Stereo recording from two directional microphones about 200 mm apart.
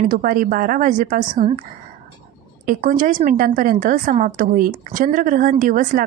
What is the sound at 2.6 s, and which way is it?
A woman's voice, 45° right (ahead or behind).